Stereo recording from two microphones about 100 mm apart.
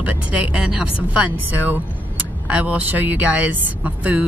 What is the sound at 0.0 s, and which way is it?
Speech, 15° right (ahead or behind).